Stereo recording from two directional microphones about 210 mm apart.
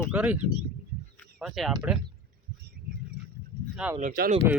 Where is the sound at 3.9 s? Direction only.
40° right (ahead or behind).